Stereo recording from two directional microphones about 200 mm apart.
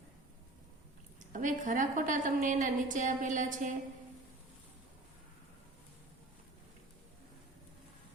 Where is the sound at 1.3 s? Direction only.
40° right (ahead or behind).